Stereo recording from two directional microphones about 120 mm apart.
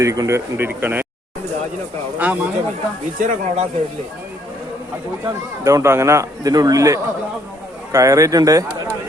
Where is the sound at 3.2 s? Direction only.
90° right.